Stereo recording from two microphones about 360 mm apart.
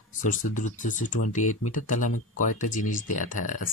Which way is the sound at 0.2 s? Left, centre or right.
Left.